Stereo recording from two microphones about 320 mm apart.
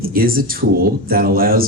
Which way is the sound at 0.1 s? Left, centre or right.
Right.